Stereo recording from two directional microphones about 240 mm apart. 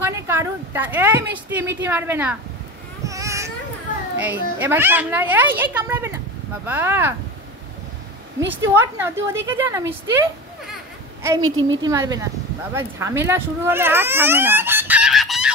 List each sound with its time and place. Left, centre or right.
0.0 s a woman's voice: centre
3.1 s baby cry: centre
4.2 s a child's voice: centre
8.4 s a child's voice: centre
11.4 s a woman's voice: right
11.8 s a child's voice: centre